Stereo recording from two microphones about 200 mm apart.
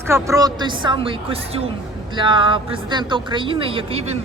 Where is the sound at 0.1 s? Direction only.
15° right (ahead or behind).